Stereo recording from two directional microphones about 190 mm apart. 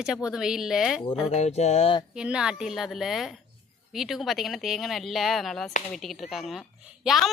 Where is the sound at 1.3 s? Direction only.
35° left (ahead or behind).